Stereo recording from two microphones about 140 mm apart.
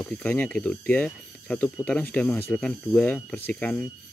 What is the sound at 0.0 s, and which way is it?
Speech, 10° left (ahead or behind).